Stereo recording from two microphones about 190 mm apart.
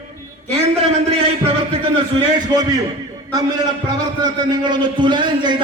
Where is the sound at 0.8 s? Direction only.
30° right (ahead or behind).